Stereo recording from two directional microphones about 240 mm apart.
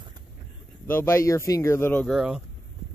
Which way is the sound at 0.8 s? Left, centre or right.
Centre.